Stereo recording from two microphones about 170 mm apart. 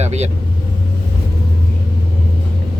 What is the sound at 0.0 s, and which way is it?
Vehicle, 40° right (ahead or behind).